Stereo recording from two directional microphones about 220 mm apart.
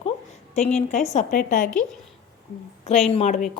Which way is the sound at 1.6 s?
5° left (ahead or behind).